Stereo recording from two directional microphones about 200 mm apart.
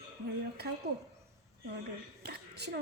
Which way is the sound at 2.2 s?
55° right (ahead or behind).